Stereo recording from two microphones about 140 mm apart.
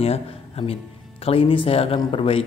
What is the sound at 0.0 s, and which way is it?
A man's voice, 45° left (ahead or behind).